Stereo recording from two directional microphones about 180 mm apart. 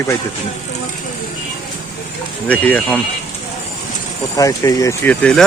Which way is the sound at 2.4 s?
10° left (ahead or behind).